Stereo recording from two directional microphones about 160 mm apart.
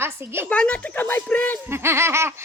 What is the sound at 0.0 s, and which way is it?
Speech, 15° right (ahead or behind).